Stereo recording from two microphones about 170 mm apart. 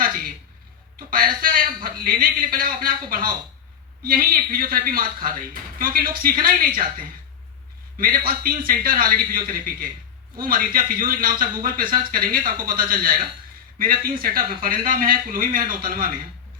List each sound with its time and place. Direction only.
0.9 s a man's voice: 60° right (ahead or behind)